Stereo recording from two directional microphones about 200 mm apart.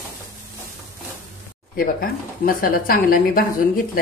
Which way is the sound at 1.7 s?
45° left (ahead or behind).